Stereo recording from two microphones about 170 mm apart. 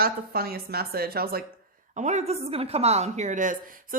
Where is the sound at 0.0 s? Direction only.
65° right (ahead or behind).